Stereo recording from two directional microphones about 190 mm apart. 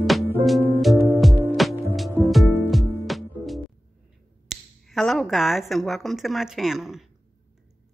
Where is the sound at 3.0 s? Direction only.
Centre (ahead or behind).